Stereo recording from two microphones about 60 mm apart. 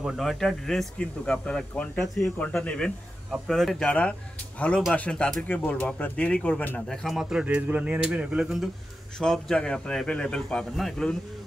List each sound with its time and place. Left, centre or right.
0.1 s speech: centre
0.9 s speech: centre
2.0 s speech: centre
2.6 s speech: centre
3.3 s speech: centre
3.8 s speech: left
7.2 s speech: centre
7.4 s speech: right
9.2 s speech: centre